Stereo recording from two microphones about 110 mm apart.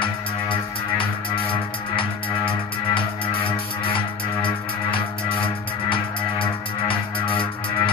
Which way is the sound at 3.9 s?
50° left (ahead or behind).